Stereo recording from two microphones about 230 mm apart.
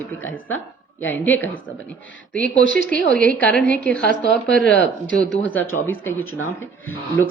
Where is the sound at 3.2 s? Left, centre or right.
Centre.